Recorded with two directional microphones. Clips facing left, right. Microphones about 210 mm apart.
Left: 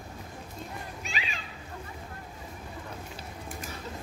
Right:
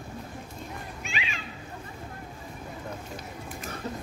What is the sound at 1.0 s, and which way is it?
Children playing, 40° left (ahead or behind).